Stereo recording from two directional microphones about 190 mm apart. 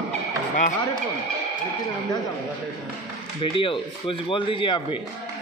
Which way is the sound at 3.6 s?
25° left (ahead or behind).